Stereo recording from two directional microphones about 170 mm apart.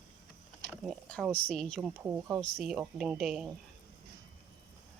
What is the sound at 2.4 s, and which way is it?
Speech, centre (ahead or behind).